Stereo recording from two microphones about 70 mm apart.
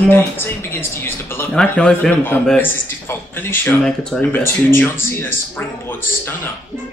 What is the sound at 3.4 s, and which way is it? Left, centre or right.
Speech, left.